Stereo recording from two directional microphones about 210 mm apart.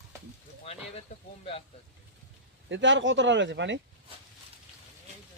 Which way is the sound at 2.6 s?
60° right (ahead or behind).